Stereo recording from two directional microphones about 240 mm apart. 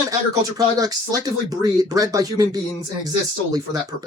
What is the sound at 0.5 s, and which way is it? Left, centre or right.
Speech, centre.